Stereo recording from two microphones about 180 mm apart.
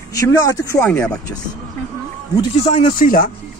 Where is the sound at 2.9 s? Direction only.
50° left (ahead or behind).